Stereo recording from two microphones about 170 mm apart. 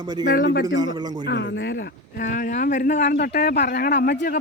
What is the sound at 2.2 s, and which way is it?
Speech, 50° left (ahead or behind).